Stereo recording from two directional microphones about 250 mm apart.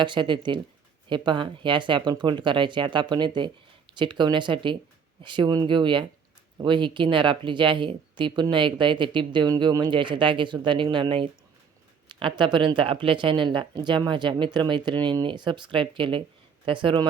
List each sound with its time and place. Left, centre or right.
0.0 s speech: centre